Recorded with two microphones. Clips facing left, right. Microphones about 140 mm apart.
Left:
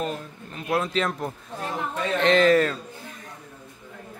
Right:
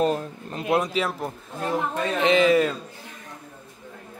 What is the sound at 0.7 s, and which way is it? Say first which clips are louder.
A man's voice: right 2 dB; 15° right (ahead or behind).